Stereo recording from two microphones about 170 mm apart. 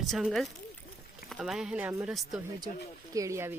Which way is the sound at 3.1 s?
20° right (ahead or behind).